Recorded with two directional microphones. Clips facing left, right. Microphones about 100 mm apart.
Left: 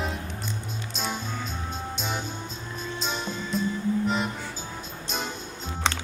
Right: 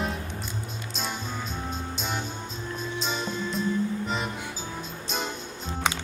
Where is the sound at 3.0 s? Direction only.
Centre (ahead or behind).